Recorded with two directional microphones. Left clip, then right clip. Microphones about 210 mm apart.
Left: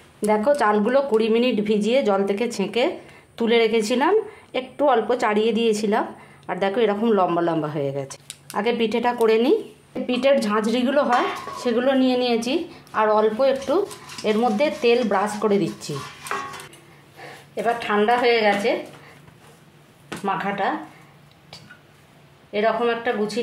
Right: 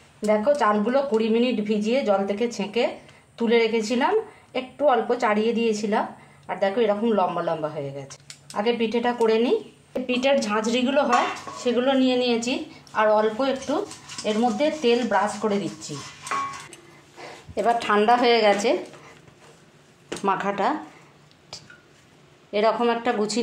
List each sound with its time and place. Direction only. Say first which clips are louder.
0.2 s a woman's voice: left 1 dB; 45° left (ahead or behind)
17.2 s speech: right 1 dB; 30° right (ahead or behind)
20.2 s speech: even; 30° right (ahead or behind)
22.5 s speech: even; 30° right (ahead or behind)